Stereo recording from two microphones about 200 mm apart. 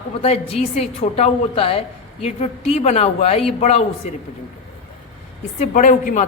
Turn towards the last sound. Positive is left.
turn(degrees=40)  # may be behind; listen again after turning